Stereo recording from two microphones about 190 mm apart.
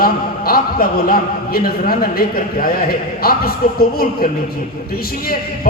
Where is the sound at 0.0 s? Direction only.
50° left (ahead or behind).